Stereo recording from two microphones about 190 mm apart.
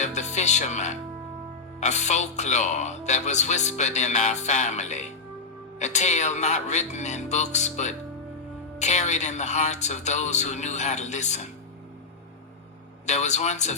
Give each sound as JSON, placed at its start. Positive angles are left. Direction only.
{"t": 0.0, "sound": "music", "side_deg": 40}
{"t": 1.8, "sound": "speech", "side_deg": 40}
{"t": 13.1, "sound": "speech", "side_deg": 40}